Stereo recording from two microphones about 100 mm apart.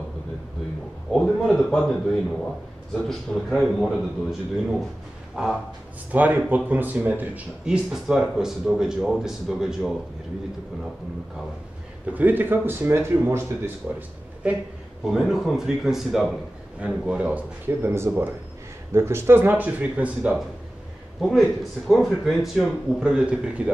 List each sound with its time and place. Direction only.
1.1 s speech: 5° left (ahead or behind)
6.1 s speech: 15° right (ahead or behind)
12.1 s a man's voice: 15° right (ahead or behind)
15.0 s a man's voice: 5° right (ahead or behind)
21.2 s speech: centre (ahead or behind)